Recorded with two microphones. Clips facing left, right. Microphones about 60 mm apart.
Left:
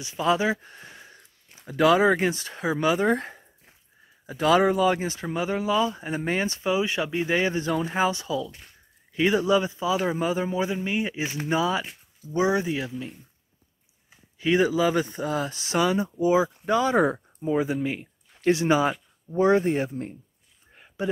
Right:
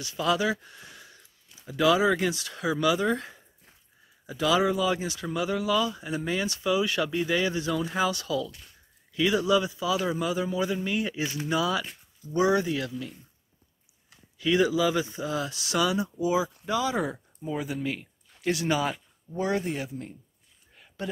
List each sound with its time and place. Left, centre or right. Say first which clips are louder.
0.0 s speech: left 3 dB; left
14.4 s speech: left 2 dB; left
17.4 s speech: left 6 dB; left
20.7 s a sound: left 5 dB; left